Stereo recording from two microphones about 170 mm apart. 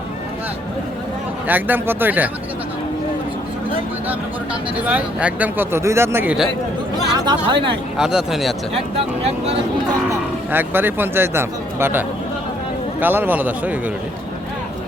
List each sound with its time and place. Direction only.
1.5 s speech: 10° right (ahead or behind)
4.8 s speech: 10° right (ahead or behind)
7.3 s speech: 30° right (ahead or behind)
7.9 s speech: 5° right (ahead or behind)
10.1 s speech: 10° right (ahead or behind)